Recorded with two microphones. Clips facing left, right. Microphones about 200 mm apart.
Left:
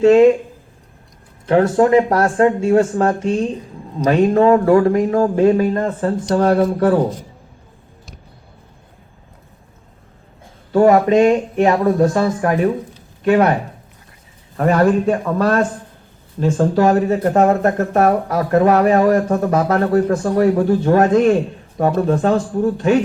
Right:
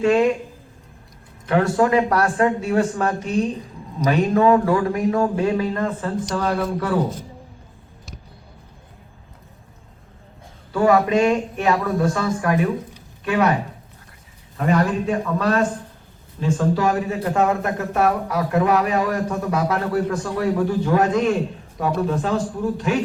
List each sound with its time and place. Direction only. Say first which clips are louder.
0.0 s speech: left 7 dB; 25° left (ahead or behind)
1.5 s speech: left 5 dB; 30° left (ahead or behind)
2.4 s speech: left 8 dB; 30° left (ahead or behind)
4.0 s speech: left 4 dB; 35° left (ahead or behind)
4.9 s speech: left 4 dB; 30° left (ahead or behind)
5.4 s speech: left 7 dB; 45° left (ahead or behind)
10.8 s speech: left 5 dB; 45° left (ahead or behind)
11.1 s speech: left 5 dB; 30° left (ahead or behind); by 23.0 s 45° left (ahead or behind)